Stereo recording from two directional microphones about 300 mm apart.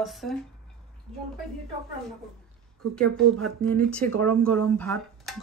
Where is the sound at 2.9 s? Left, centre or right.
Centre.